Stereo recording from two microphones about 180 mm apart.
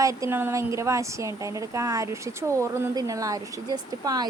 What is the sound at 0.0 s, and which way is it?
A woman's voice, 15° right (ahead or behind).